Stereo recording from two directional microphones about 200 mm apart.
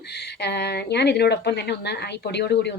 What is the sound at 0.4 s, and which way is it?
A woman's voice, 55° left (ahead or behind).